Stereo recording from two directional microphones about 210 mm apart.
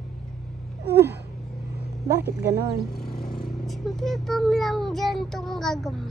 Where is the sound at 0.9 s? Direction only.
10° right (ahead or behind).